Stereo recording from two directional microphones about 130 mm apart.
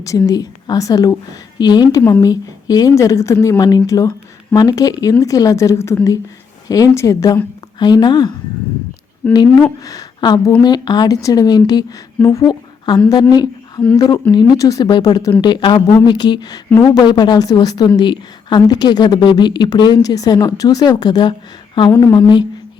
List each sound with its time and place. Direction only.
0.0 s a woman's voice: 25° left (ahead or behind)
3.6 s a woman's voice: 30° left (ahead or behind)
9.3 s a woman's voice: 30° left (ahead or behind)
13.3 s a sound: 30° left (ahead or behind)
13.9 s a woman's voice: 30° left (ahead or behind)